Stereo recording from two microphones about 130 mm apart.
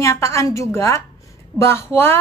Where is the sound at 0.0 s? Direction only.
25° left (ahead or behind).